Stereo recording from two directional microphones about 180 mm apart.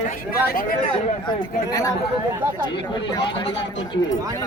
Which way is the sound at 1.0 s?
25° left (ahead or behind).